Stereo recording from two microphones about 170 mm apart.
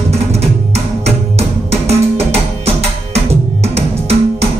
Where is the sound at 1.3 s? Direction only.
35° right (ahead or behind).